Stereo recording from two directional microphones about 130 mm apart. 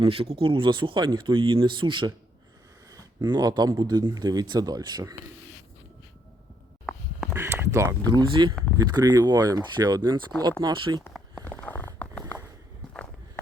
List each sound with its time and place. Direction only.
0.0 s speech: 45° right (ahead or behind); by 5.1 s 30° right (ahead or behind)
7.3 s speech: 20° right (ahead or behind); by 11.0 s 35° right (ahead or behind)
11.4 s a sound: 15° left (ahead or behind)